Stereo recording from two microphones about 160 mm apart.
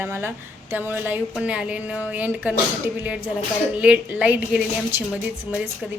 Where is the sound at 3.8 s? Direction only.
10° right (ahead or behind).